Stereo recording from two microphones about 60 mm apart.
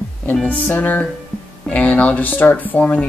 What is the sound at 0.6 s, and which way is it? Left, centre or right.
Speech, left.